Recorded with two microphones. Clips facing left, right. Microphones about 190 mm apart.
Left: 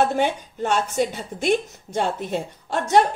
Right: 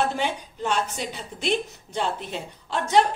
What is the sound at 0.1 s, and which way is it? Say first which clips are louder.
A woman's voice: left 5 dB; 50° left (ahead or behind).